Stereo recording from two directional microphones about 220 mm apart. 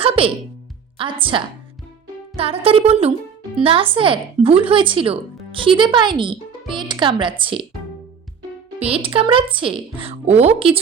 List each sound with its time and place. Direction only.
0.2 s speech: 25° right (ahead or behind)
8.8 s speech: 25° right (ahead or behind)